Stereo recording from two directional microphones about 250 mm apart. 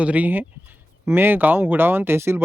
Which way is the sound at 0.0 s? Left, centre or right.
Centre.